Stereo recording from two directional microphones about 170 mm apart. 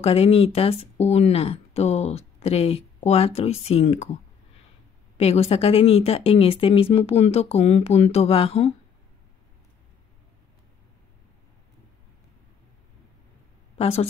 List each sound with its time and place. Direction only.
0.0 s speech: 35° left (ahead or behind)
5.1 s speech: 40° left (ahead or behind)
13.7 s a woman's voice: 35° left (ahead or behind)